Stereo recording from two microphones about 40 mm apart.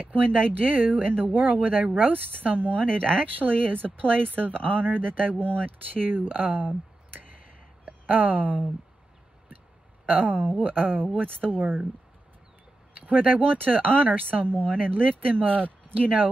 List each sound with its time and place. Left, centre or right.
0.1 s speech: left
0.7 s speech: right
7.8 s a sound: right
10.0 s speech: right
13.1 s speech: right